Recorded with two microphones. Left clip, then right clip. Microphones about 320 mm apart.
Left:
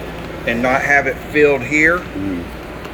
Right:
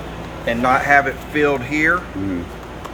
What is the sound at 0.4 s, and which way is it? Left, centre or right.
Speech, centre.